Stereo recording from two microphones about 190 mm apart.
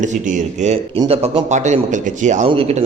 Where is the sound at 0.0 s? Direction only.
40° right (ahead or behind).